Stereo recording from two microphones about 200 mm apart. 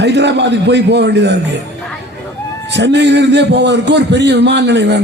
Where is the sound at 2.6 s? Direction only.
60° right (ahead or behind).